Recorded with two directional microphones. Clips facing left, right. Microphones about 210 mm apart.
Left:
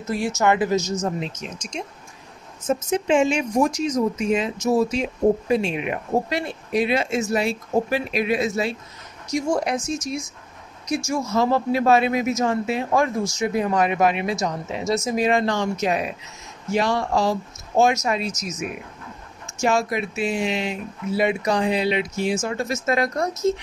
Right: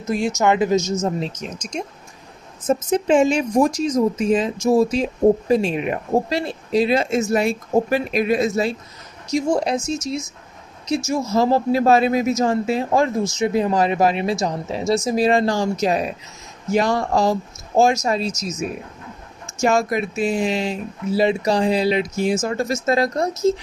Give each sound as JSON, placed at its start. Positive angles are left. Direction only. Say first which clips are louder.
{"t": 0.0, "sound": "speech", "louder": "right 2 dB", "side_deg": -20}
{"t": 1.2, "sound": "speech", "louder": "right 3 dB", "side_deg": -40}
{"t": 9.3, "sound": "speech", "louder": "right 3 dB", "side_deg": -25}
{"t": 11.3, "sound": "speech", "louder": "right 3 dB", "side_deg": -35}